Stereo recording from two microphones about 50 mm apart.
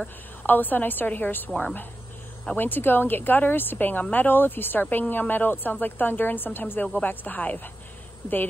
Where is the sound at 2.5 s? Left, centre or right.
Left.